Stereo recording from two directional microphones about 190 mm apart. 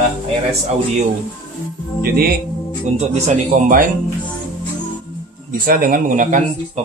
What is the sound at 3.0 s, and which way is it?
Speech, 35° right (ahead or behind).